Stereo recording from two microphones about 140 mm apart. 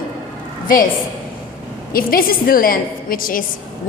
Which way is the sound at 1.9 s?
90° left.